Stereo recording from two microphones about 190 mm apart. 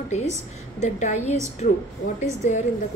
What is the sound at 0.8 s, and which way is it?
Speech, 40° left (ahead or behind).